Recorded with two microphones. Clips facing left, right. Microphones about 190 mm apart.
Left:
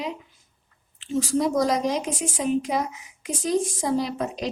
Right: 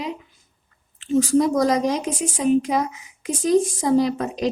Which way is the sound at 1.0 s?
45° right (ahead or behind).